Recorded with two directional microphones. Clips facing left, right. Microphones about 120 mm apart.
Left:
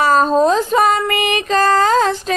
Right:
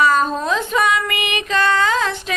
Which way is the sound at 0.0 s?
35° left (ahead or behind).